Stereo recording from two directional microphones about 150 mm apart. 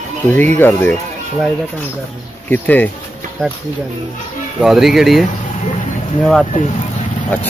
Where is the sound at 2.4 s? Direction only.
10° left (ahead or behind).